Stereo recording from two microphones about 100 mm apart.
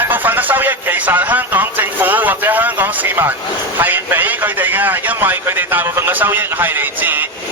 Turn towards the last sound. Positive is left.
turn(degrees=-20)  # may be behind; listen again after turning